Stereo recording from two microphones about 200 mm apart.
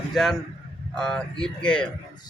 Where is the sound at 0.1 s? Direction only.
Centre (ahead or behind).